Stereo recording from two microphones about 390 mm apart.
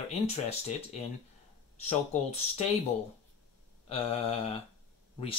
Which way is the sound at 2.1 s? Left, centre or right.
Centre.